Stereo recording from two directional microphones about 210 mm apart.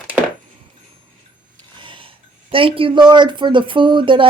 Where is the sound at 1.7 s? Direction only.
25° right (ahead or behind).